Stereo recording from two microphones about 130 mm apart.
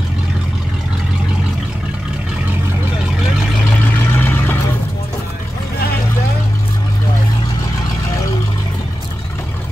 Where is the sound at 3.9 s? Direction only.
15° left (ahead or behind).